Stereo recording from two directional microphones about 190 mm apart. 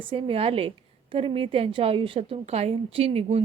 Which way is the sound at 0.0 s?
30° right (ahead or behind).